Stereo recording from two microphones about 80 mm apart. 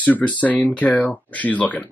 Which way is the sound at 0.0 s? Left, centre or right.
Centre.